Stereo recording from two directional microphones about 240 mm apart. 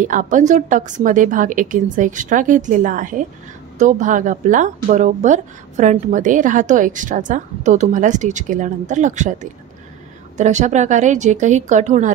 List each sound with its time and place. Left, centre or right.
0.0 s a woman's voice: right